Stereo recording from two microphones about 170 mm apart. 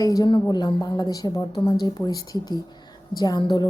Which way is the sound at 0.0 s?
20° left (ahead or behind).